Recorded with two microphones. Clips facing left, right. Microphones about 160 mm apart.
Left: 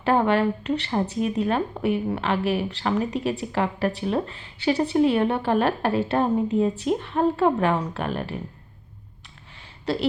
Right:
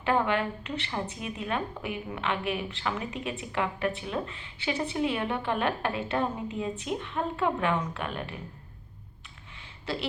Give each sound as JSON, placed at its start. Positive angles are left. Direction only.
{"t": 0.0, "sound": "a woman's voice", "side_deg": 35}